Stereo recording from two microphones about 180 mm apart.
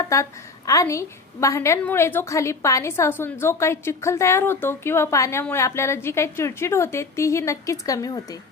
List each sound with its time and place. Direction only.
0.0 s a woman's voice: 15° left (ahead or behind)